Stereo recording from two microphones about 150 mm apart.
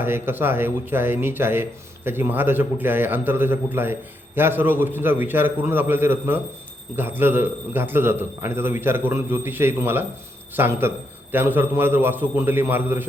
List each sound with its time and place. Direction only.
0.0 s a man's voice: 15° right (ahead or behind)